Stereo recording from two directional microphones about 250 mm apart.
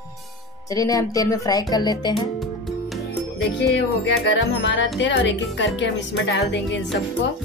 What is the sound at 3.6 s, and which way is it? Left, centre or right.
Speech, left.